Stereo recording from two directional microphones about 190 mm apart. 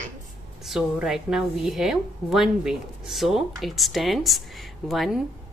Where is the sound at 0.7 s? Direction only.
Centre (ahead or behind).